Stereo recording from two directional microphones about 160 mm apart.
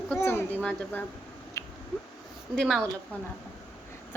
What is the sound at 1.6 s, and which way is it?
Finger snapping, 20° left (ahead or behind).